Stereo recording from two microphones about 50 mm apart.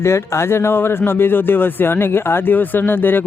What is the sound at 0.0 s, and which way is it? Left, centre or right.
Speech, left.